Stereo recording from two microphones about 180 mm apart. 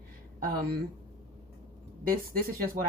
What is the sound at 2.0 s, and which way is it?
Speech, 55° right (ahead or behind).